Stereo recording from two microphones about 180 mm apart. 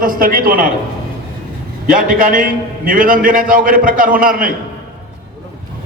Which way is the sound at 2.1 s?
50° right (ahead or behind).